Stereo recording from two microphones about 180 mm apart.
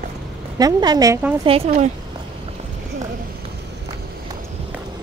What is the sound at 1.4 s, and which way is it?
Speech, 35° right (ahead or behind).